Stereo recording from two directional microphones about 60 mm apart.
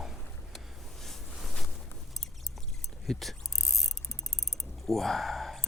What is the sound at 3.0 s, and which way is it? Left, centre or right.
Mechanisms, centre.